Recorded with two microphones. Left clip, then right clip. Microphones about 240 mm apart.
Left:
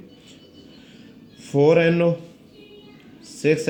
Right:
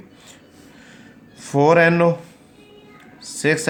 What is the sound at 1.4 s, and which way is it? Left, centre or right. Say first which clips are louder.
Speech: right 2 dB; centre.